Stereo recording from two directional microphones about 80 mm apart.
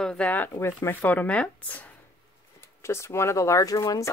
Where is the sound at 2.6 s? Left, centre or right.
Left.